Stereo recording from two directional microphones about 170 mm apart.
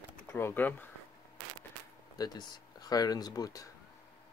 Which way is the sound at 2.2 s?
20° left (ahead or behind).